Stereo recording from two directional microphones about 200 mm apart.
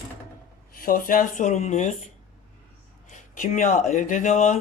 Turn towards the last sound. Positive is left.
turn(degrees=40)  # may be behind; listen again after turning